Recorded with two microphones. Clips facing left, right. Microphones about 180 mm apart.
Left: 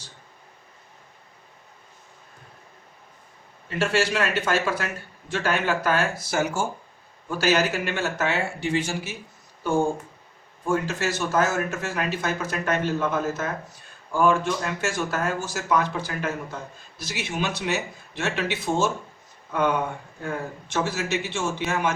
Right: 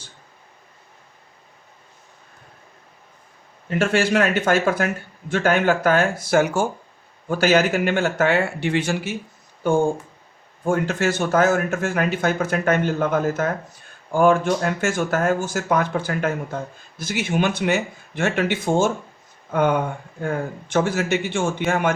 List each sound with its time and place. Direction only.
3.7 s speech: 50° right (ahead or behind)
10.7 s speech: 55° right (ahead or behind)